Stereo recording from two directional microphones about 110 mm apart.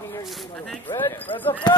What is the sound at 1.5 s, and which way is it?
Speech, 40° left (ahead or behind).